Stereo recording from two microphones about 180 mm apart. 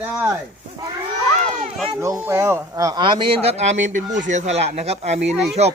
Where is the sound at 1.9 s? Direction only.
15° right (ahead or behind).